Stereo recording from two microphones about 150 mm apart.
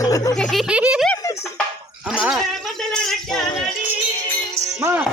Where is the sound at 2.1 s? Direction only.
5° right (ahead or behind).